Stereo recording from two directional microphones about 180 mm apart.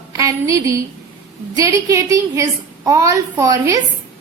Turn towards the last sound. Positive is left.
turn(degrees=-20)  # may be behind; listen again after turning